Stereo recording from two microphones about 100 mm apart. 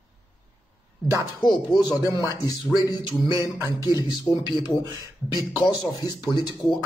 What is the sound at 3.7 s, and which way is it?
Speech, 40° left (ahead or behind).